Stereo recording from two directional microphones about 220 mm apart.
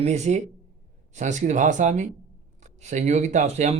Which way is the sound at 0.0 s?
30° right (ahead or behind).